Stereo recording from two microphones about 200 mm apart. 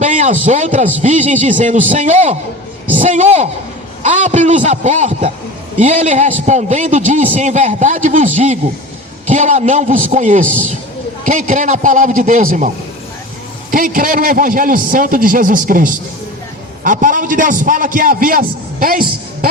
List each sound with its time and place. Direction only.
0.0 s a man's voice: 40° right (ahead or behind)